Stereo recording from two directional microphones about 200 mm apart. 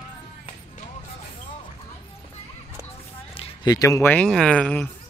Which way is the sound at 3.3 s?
25° left (ahead or behind).